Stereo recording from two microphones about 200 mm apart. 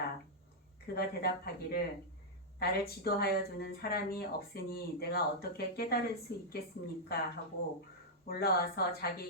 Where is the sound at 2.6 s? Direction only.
50° left (ahead or behind).